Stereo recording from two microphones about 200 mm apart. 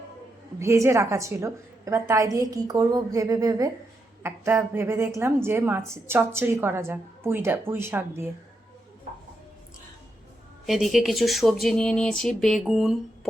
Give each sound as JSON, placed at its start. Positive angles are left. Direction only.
{"t": 0.6, "sound": "a woman's voice", "side_deg": -15}
{"t": 10.7, "sound": "speech", "side_deg": 0}